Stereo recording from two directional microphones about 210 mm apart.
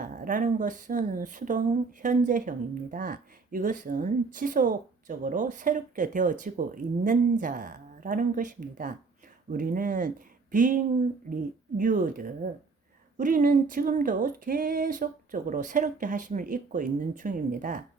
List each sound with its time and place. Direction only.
0.0 s speech: 40° right (ahead or behind)
11.8 s speech: 40° right (ahead or behind)